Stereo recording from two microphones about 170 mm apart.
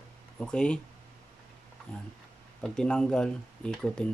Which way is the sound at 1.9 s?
5° left (ahead or behind).